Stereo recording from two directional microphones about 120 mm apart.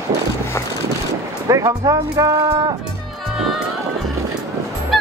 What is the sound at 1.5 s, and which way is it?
Speech, 30° right (ahead or behind).